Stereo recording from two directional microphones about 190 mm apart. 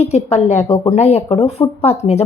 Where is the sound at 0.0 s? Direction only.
35° left (ahead or behind).